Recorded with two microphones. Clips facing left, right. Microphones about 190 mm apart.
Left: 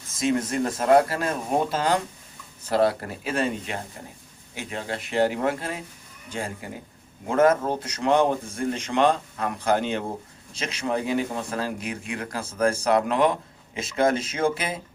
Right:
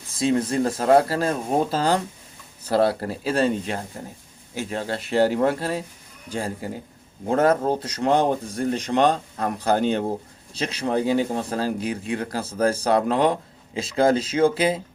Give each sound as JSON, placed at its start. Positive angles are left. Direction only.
{"t": 0.2, "sound": "speech", "side_deg": -35}